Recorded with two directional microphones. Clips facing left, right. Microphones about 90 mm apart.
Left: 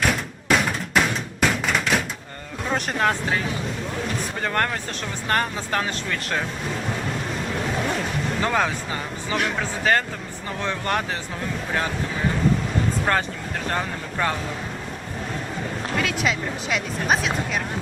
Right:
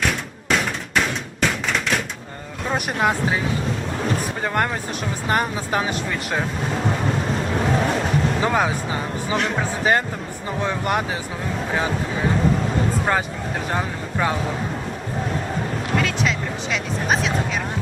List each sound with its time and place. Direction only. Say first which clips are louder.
0.0 s thump: left 1 dB; centre (ahead or behind)
2.6 s speech: right 1 dB; 10° right (ahead or behind)
4.4 s speech: right 1 dB; 15° right (ahead or behind)
8.4 s speech: right 2 dB; 10° right (ahead or behind)
13.1 s speech: right 1 dB; 15° right (ahead or behind)
16.0 s speech: right 1 dB; centre (ahead or behind)